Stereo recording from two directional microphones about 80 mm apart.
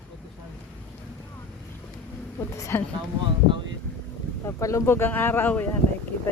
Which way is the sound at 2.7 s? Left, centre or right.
Left.